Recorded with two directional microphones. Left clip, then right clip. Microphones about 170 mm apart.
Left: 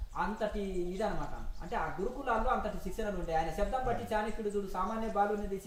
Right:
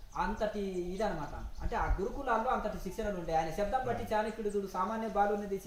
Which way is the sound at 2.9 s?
15° right (ahead or behind).